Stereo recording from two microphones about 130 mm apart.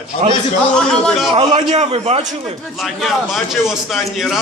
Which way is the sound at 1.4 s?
55° right (ahead or behind).